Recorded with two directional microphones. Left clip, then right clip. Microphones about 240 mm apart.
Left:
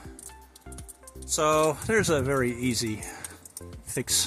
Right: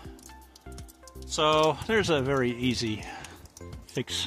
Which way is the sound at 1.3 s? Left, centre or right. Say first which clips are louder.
Even; centre.